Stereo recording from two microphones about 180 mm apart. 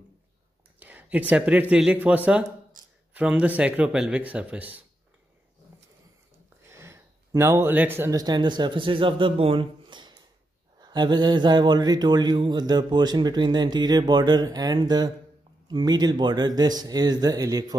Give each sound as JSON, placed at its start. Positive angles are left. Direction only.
{"t": 0.7, "sound": "a sound", "side_deg": -10}
{"t": 1.3, "sound": "speech", "side_deg": -5}
{"t": 6.7, "sound": "speech", "side_deg": -15}